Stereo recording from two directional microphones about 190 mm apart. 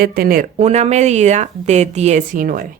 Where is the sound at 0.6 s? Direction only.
35° right (ahead or behind).